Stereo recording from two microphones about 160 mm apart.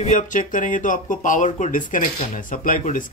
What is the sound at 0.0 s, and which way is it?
Speech, 50° left (ahead or behind).